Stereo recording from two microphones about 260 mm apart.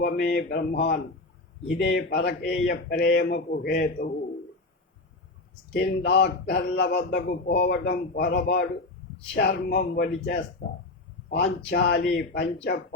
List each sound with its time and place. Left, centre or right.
0.0 s speech: left
5.8 s speech: left